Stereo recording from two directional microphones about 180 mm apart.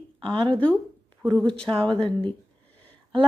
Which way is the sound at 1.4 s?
5° left (ahead or behind).